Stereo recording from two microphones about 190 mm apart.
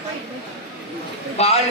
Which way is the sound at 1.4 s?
35° left (ahead or behind).